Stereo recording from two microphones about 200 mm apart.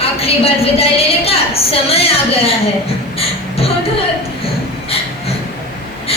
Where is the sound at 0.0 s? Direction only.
30° left (ahead or behind).